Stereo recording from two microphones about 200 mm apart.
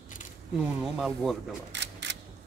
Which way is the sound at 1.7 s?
60° right (ahead or behind).